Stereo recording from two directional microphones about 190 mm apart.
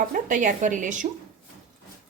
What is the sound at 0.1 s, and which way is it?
Speech, 45° right (ahead or behind).